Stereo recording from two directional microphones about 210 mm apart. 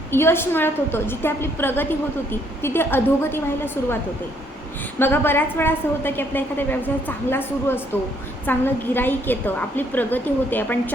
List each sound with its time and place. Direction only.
0.1 s a woman's voice: 10° left (ahead or behind)
4.9 s a woman's voice: 10° left (ahead or behind)